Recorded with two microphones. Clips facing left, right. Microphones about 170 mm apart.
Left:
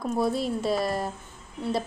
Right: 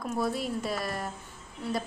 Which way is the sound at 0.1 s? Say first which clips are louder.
Left 4 dB; 30° left (ahead or behind).